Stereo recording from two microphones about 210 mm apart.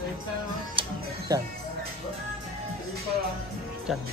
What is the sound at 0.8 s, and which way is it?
Speech, 15° right (ahead or behind).